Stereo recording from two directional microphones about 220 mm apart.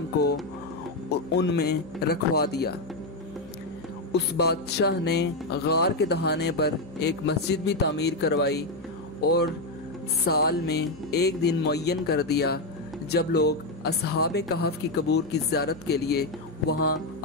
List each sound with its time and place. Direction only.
1.1 s speech: 50° left (ahead or behind)
4.1 s speech: 50° left (ahead or behind)